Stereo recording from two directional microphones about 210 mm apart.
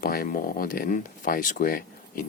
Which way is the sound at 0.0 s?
45° left (ahead or behind).